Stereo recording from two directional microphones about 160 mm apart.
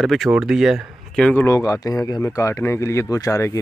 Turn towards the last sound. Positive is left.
turn(degrees=20)  # may be behind; listen again after turning